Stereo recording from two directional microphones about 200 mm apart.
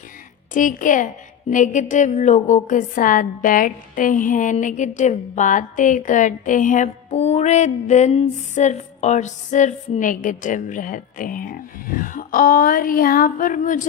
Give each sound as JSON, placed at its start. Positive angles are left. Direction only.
{"t": 0.5, "sound": "a woman's voice", "side_deg": 40}